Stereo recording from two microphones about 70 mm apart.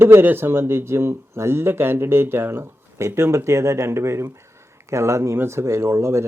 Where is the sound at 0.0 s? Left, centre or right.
Right.